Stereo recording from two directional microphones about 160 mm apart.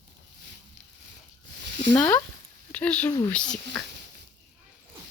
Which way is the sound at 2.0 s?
15° left (ahead or behind).